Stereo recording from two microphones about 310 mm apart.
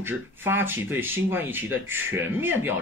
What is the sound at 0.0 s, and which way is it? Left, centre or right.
Speech, centre.